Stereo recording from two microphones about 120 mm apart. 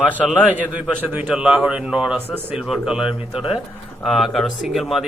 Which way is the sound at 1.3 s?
5° right (ahead or behind).